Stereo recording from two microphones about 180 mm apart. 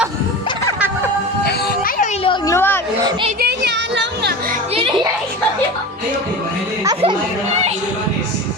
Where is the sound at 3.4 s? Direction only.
65° right (ahead or behind).